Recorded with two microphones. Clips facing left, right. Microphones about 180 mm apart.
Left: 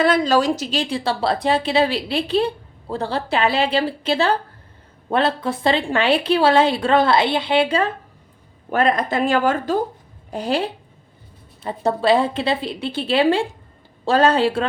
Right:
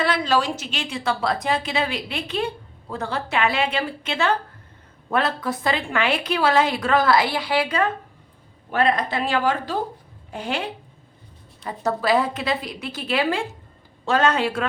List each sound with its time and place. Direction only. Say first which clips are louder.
0.0 s a woman's voice: left 5 dB; 45° left (ahead or behind); by 7.9 s 25° left (ahead or behind)
8.7 s speech: left 3 dB; 45° left (ahead or behind)
10.3 s a woman's voice: left 6 dB; 35° left (ahead or behind)